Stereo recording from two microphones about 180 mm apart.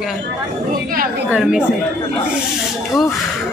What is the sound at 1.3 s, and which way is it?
Speech, 5° right (ahead or behind).